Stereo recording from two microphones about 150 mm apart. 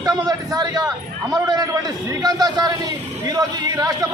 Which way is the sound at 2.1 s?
25° right (ahead or behind).